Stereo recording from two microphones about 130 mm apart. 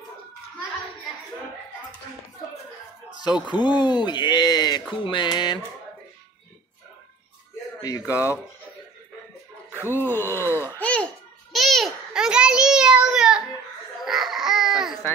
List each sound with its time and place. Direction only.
3.4 s speech: 35° left (ahead or behind)
8.1 s speech: 25° left (ahead or behind)
9.8 s speech: 15° left (ahead or behind)
10.5 s babbling: 15° left (ahead or behind)
11.5 s babbling: centre (ahead or behind)
14.0 s laughter: centre (ahead or behind)